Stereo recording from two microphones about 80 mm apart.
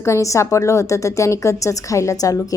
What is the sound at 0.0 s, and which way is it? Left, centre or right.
Speech, left.